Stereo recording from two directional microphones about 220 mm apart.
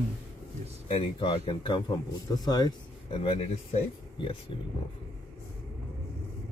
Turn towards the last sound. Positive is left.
turn(degrees=20)  # may be behind; listen again after turning